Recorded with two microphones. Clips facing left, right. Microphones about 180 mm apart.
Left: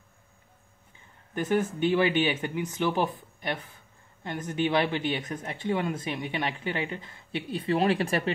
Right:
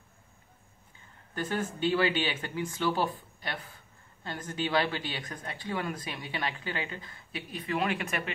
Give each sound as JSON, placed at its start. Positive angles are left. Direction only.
{"t": 1.3, "sound": "speech", "side_deg": 20}